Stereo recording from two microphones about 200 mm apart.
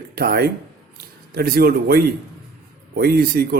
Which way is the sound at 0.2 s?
50° right (ahead or behind).